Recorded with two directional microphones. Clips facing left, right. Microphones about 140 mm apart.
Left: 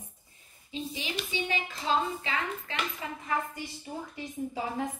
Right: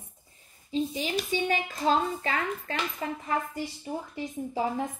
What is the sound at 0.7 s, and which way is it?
A woman's voice, 40° right (ahead or behind).